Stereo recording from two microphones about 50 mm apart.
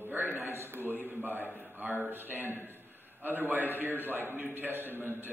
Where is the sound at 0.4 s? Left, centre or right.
Right.